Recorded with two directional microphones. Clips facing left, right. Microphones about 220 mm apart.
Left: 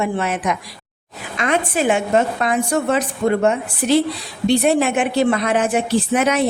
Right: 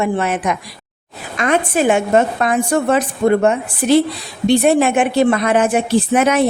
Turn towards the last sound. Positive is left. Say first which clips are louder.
# right 3 dB
turn(degrees=-50)  # may be behind; listen again after turning